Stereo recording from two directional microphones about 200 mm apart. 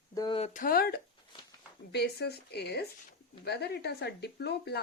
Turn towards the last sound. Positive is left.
turn(degrees=55)  # may be behind; listen again after turning